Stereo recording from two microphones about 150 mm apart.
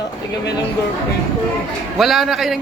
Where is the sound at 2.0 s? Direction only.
Centre (ahead or behind).